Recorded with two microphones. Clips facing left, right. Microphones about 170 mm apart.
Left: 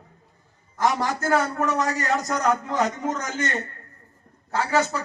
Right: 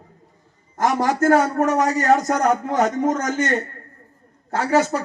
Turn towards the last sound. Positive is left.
turn(degrees=-50)  # may be behind; listen again after turning